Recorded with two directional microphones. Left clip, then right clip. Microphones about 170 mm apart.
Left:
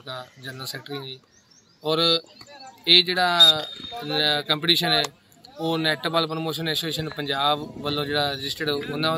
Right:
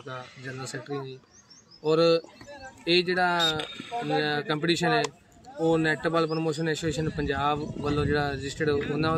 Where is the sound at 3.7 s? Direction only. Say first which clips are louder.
Right 1 dB; 80° right.